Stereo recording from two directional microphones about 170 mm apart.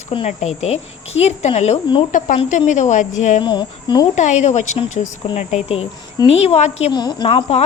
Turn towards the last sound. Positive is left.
turn(degrees=40)  # may be behind; listen again after turning